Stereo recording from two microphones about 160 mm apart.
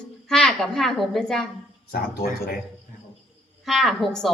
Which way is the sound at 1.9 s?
70° left (ahead or behind).